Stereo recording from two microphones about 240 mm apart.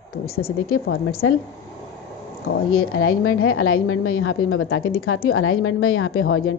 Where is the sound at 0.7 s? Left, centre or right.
Left.